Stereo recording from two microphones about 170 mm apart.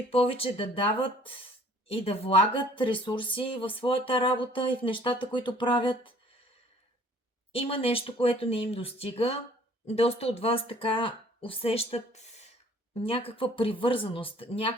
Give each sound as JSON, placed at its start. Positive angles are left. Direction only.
{"t": 0.1, "sound": "speech", "side_deg": 35}
{"t": 7.5, "sound": "speech", "side_deg": 35}